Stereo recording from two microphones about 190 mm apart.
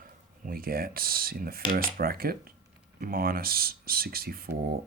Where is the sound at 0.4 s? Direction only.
50° right (ahead or behind).